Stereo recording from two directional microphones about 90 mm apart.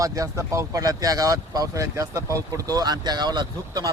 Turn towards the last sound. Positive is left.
turn(degrees=-50)  # may be behind; listen again after turning